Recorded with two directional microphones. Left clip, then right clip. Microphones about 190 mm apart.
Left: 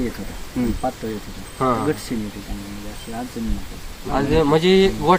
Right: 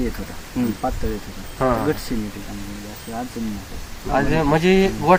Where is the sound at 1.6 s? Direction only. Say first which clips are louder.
Even; 15° right (ahead or behind).